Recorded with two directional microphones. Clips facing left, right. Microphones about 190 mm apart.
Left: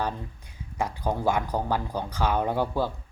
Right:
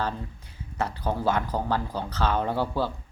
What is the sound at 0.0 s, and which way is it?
Speech, 15° left (ahead or behind).